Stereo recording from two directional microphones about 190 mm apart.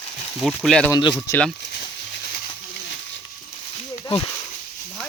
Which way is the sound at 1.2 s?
15° left (ahead or behind).